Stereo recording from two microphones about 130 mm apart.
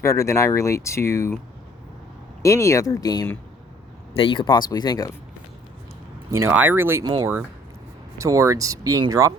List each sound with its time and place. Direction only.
0.0 s speech: 20° left (ahead or behind)
2.4 s speech: 25° left (ahead or behind)
4.1 s speech: 40° left (ahead or behind)
4.5 s speech: 30° left (ahead or behind)
6.3 s speech: 15° right (ahead or behind)
7.0 s speech: 30° right (ahead or behind)